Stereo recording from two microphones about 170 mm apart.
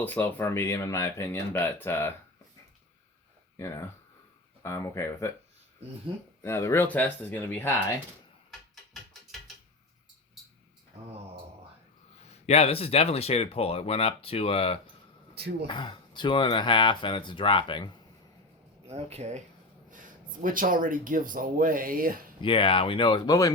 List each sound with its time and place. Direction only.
0.0 s speech: 10° left (ahead or behind)
4.6 s speech: 15° left (ahead or behind)
6.4 s speech: 15° left (ahead or behind)
8.4 s a sound: centre (ahead or behind)
12.2 s speech: 40° left (ahead or behind)
18.9 s speech: 40° right (ahead or behind)
20.4 s speech: 55° right (ahead or behind)
22.4 s speech: 30° left (ahead or behind)